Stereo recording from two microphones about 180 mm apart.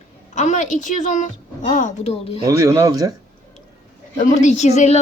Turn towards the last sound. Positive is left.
turn(degrees=40)  # may be behind; listen again after turning